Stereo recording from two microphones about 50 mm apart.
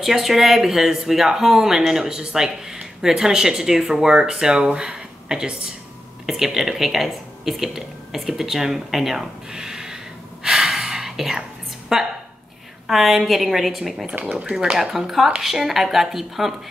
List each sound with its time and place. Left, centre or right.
0.0 s speech: centre
10.4 s gasp: centre
11.9 s a woman's voice: centre
14.5 s a woman's voice: centre